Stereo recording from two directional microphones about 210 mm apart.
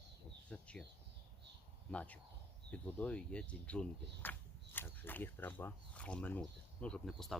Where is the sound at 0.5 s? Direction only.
5° left (ahead or behind).